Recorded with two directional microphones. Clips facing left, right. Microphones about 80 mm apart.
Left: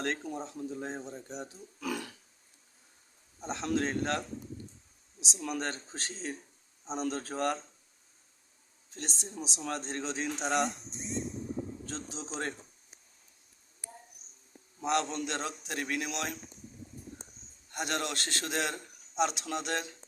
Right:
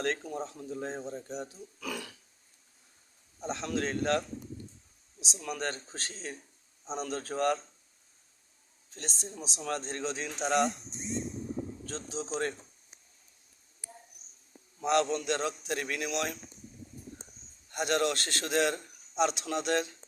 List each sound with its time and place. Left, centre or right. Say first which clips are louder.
0.0 s a man's voice: right 2 dB; centre
3.4 s a man's voice: left 1 dB; centre
5.2 s a man's voice: even; centre
9.0 s speech: left 1 dB; centre
11.9 s a man's voice: right 4 dB; centre
14.8 s a man's voice: right 3 dB; centre
17.7 s a man's voice: right 5 dB; centre